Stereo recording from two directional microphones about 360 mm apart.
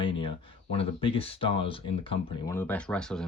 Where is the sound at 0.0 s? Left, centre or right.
Centre.